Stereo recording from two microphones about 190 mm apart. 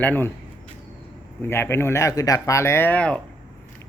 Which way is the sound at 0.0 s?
10° left (ahead or behind).